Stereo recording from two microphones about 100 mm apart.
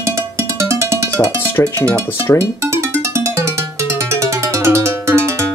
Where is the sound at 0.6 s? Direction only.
30° right (ahead or behind).